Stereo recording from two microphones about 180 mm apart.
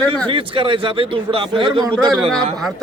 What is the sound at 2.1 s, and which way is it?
Speech, centre (ahead or behind).